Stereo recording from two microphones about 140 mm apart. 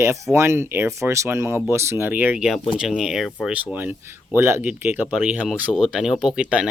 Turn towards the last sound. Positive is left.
turn(degrees=-10)  # may be behind; listen again after turning